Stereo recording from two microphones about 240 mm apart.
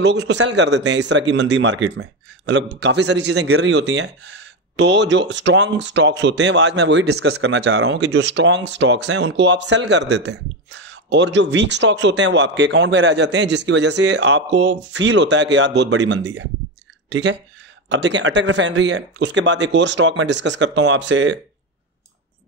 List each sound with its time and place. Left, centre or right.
0.0 s a man's voice: right